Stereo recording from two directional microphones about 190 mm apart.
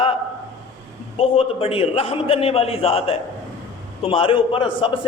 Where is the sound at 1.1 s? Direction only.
30° left (ahead or behind).